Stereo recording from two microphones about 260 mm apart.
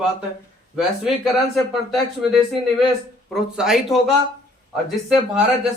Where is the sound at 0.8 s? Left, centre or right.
Centre.